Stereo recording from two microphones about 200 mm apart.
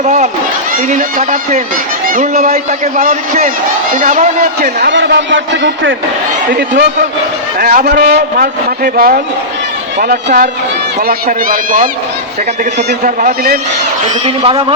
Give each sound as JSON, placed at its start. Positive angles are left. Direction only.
{"t": 0.9, "sound": "a man's voice", "side_deg": -40}
{"t": 4.8, "sound": "a man's voice", "side_deg": -60}
{"t": 12.9, "sound": "a man's voice", "side_deg": -45}
{"t": 14.3, "sound": "a man's voice", "side_deg": -30}